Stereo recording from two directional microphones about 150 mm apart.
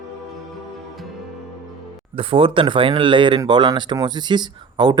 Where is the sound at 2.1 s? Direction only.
35° right (ahead or behind).